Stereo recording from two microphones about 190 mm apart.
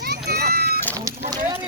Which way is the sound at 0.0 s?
55° right (ahead or behind).